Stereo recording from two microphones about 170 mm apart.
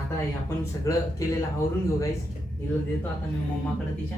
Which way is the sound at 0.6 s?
20° left (ahead or behind).